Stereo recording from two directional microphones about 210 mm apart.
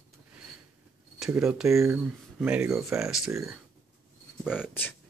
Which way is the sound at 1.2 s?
5° right (ahead or behind).